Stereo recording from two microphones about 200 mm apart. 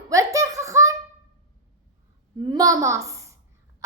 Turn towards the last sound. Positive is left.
turn(degrees=-15)  # may be behind; listen again after turning